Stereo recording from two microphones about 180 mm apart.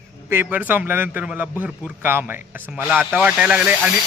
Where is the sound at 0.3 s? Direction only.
10° right (ahead or behind).